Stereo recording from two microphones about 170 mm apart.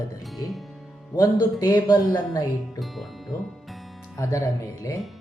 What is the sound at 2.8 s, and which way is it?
Music, centre (ahead or behind).